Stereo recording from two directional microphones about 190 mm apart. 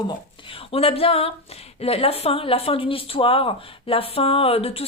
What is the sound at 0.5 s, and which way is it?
Speech, 30° left (ahead or behind).